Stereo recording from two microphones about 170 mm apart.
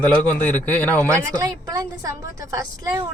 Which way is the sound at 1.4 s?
20° right (ahead or behind).